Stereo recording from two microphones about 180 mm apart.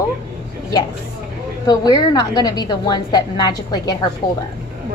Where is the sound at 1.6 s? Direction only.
20° left (ahead or behind).